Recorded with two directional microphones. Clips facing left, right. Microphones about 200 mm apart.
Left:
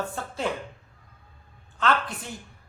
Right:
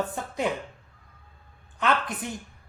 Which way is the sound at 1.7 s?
15° right (ahead or behind).